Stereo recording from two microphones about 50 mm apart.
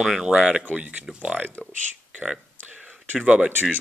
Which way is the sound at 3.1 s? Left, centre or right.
Right.